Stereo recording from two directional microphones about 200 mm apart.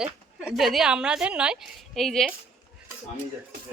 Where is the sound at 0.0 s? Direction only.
5° right (ahead or behind).